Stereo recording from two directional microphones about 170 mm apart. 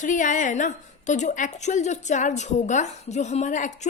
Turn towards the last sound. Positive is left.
turn(degrees=50)  # may be behind; listen again after turning